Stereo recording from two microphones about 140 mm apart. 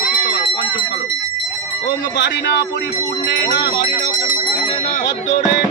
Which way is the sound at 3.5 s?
90° left.